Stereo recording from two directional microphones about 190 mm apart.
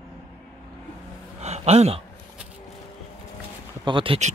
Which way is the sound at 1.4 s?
35° right (ahead or behind).